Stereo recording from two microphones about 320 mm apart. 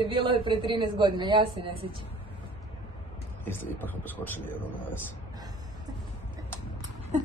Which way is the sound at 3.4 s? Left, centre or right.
Centre.